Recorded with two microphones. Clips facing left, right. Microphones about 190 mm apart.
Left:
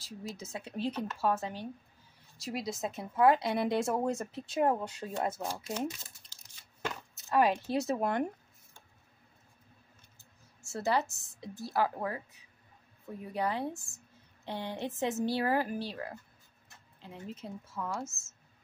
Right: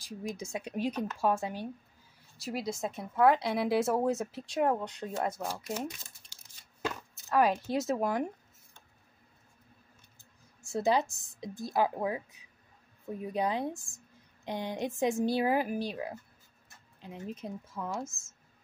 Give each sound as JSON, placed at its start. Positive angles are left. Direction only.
{"t": 0.0, "sound": "a woman's voice", "side_deg": -15}
{"t": 2.3, "sound": "speech", "side_deg": 0}
{"t": 6.8, "sound": "a sound", "side_deg": 0}
{"t": 7.6, "sound": "speech", "side_deg": 0}
{"t": 10.6, "sound": "a woman's voice", "side_deg": -15}